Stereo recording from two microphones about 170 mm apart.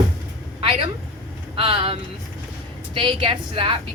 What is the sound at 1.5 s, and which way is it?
A woman's voice, 35° right (ahead or behind).